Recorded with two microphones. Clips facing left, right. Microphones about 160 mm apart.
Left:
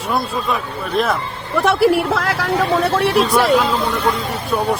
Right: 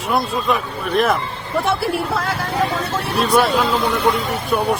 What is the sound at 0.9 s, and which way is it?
Speech, centre (ahead or behind).